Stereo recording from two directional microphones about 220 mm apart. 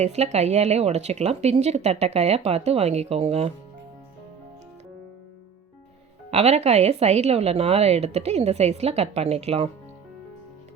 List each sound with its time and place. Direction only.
0.0 s speech: 30° right (ahead or behind)
6.3 s speech: 30° right (ahead or behind)